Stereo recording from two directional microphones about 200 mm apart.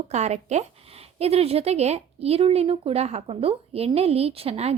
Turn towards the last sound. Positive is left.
turn(degrees=-30)  # may be behind; listen again after turning